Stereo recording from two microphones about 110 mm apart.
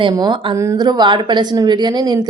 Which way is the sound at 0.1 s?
40° right (ahead or behind).